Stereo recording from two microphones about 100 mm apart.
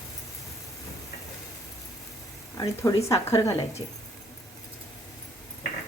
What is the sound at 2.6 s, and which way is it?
Speech, 35° left (ahead or behind).